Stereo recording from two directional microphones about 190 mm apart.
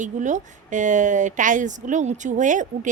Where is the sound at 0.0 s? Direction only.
40° right (ahead or behind).